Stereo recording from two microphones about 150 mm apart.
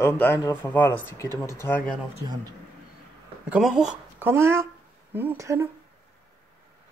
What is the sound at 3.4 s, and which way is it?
Speech, 5° right (ahead or behind).